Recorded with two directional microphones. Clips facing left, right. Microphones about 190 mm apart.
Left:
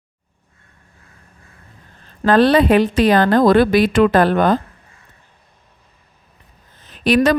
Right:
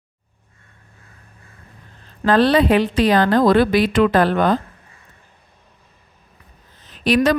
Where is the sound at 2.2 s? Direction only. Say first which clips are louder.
Left 2 dB; 50° left (ahead or behind).